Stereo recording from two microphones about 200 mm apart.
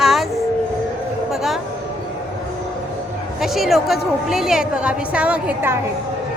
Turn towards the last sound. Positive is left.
turn(degrees=-10)  # may be behind; listen again after turning